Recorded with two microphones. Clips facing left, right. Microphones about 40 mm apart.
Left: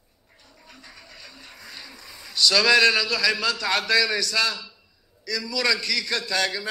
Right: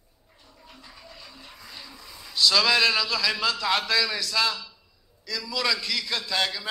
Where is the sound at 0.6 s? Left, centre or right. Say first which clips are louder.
Even; centre.